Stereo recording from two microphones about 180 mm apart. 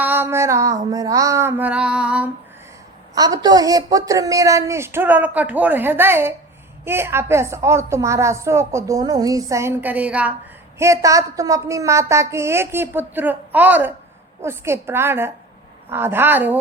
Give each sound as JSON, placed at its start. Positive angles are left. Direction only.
{"t": 0.0, "sound": "a sound", "side_deg": -10}
{"t": 0.9, "sound": "speech", "side_deg": -20}
{"t": 3.2, "sound": "speech", "side_deg": -20}